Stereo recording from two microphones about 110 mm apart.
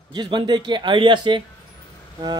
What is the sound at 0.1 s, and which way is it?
A man's voice, 45° right (ahead or behind).